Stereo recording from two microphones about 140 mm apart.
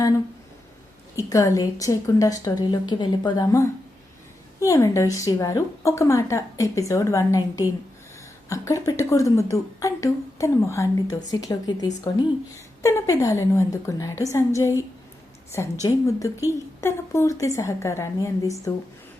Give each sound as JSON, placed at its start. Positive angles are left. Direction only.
{"t": 1.3, "sound": "a woman's voice", "side_deg": 25}